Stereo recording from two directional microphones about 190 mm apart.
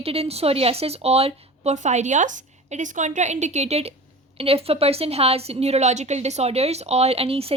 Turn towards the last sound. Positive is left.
turn(degrees=-30)  # may be behind; listen again after turning